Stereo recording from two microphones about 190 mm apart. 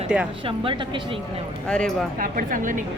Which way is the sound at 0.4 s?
30° right (ahead or behind).